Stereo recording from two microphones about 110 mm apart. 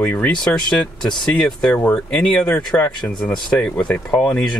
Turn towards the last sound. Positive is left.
turn(degrees=5)  # may be behind; listen again after turning